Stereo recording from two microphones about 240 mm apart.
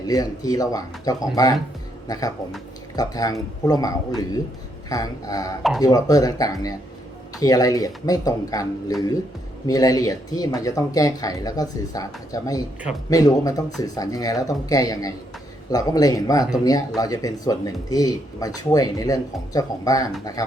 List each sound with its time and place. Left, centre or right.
0.1 s speech: centre
2.9 s speech: centre